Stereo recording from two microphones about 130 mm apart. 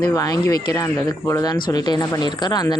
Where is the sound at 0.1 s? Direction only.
25° left (ahead or behind).